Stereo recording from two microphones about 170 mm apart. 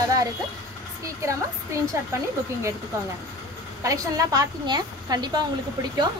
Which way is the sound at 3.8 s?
20° right (ahead or behind).